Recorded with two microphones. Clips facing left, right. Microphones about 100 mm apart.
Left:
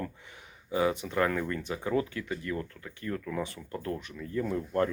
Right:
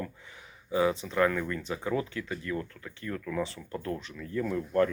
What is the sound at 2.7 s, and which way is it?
Speech, 35° left (ahead or behind).